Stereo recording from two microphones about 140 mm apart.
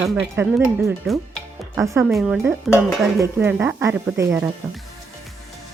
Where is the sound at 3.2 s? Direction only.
15° right (ahead or behind).